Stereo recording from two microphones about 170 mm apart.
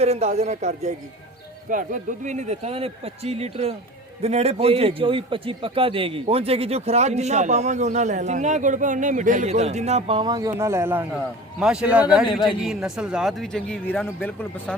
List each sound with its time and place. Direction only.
0.0 s a man's voice: 40° right (ahead or behind); by 14.8 s 10° left (ahead or behind)